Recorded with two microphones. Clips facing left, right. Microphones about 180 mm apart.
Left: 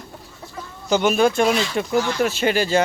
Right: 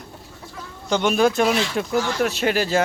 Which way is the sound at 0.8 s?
5° left (ahead or behind).